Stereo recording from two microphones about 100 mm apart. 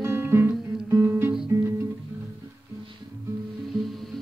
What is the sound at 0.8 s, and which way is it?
Guitar, 25° right (ahead or behind).